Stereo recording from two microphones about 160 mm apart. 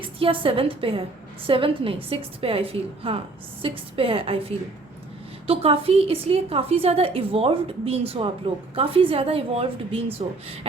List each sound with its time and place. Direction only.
0.0 s a woman's voice: 35° right (ahead or behind)